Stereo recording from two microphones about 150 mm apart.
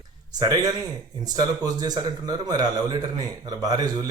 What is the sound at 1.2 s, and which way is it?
Speech, 25° right (ahead or behind).